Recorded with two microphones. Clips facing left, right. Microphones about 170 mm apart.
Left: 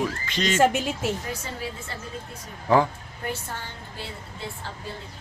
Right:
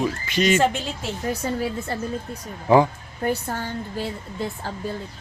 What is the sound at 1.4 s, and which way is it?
Speech, 45° right (ahead or behind).